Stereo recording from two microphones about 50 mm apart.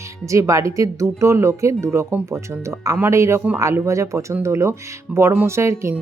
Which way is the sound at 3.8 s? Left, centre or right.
Right.